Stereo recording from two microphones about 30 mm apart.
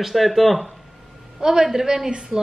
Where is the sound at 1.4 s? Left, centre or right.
Centre.